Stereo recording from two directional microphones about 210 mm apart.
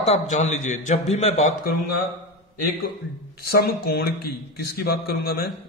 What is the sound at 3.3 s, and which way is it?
A man's voice, 50° left (ahead or behind).